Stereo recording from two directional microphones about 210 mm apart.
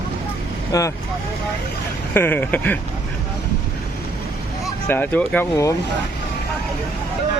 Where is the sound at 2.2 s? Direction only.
10° left (ahead or behind).